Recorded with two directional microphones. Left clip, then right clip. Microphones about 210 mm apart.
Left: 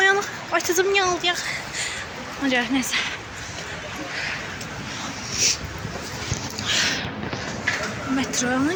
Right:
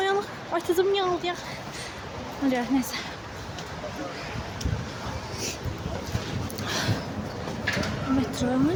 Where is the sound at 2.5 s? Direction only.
5° right (ahead or behind).